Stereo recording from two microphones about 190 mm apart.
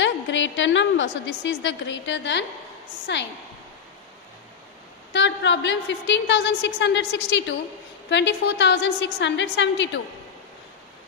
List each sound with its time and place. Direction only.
0.0 s a woman's voice: 75° left (ahead or behind)
5.1 s a woman's voice: 70° left (ahead or behind)